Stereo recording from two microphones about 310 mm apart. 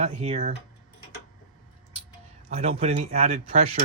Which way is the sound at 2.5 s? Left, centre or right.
Right.